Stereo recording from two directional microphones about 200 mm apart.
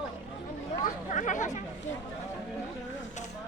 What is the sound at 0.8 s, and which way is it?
Chatter, 40° left (ahead or behind).